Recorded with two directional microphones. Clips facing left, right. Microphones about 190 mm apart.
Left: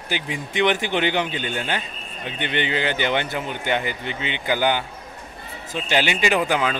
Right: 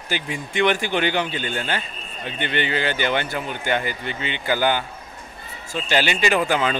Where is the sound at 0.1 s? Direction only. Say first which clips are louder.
Even; 20° left (ahead or behind).